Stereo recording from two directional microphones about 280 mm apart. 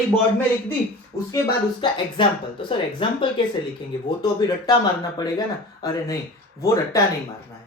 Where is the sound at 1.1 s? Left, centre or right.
Centre.